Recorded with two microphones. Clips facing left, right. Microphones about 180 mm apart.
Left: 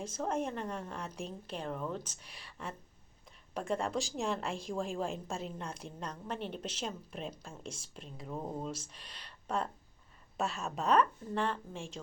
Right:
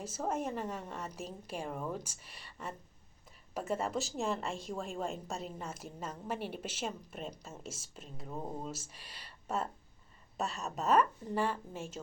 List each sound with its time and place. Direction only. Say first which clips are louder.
0.0 s a woman's voice: left 1 dB; 5° right (ahead or behind)